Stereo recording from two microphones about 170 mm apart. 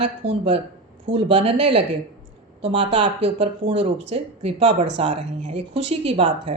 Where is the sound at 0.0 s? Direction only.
35° right (ahead or behind).